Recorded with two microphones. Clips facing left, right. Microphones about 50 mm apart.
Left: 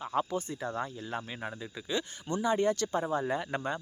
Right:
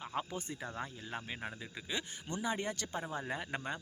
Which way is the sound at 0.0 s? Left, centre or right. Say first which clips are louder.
Left 8 dB; centre.